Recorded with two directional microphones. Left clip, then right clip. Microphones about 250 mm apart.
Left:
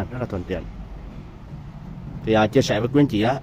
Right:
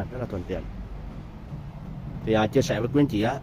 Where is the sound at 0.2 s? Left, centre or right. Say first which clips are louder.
Left 4 dB; centre.